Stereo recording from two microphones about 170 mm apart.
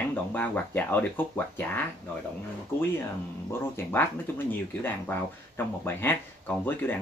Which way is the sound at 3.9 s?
10° left (ahead or behind).